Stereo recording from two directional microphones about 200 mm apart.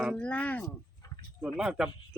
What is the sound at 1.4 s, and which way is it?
Speech, 5° right (ahead or behind).